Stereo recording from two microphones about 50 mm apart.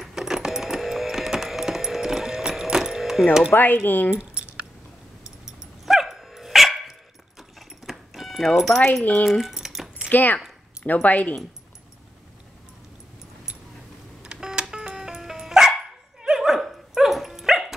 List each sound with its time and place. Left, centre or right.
0.0 s music: centre
3.5 s speech: left
4.2 s keys jangling: right
5.2 s dog: centre
8.5 s speech: centre
9.2 s a sound: centre
10.0 s speech: left
14.2 s music: centre
16.2 s dog: centre